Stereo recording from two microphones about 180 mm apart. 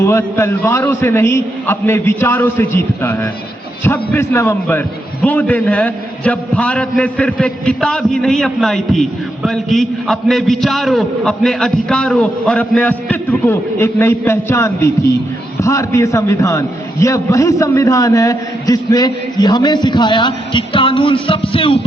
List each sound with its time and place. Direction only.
0.0 s a man's voice: 15° left (ahead or behind); by 21.8 s 30° left (ahead or behind)